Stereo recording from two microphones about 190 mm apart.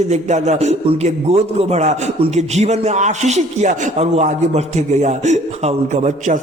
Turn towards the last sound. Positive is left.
turn(degrees=-40)  # may be behind; listen again after turning